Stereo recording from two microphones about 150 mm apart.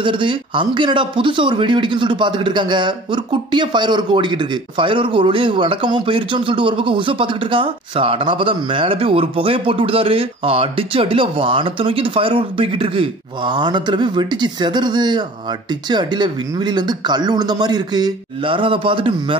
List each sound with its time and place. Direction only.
0.0 s speech: 35° right (ahead or behind)